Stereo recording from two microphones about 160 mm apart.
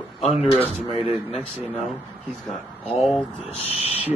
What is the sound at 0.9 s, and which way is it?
Speech, centre (ahead or behind).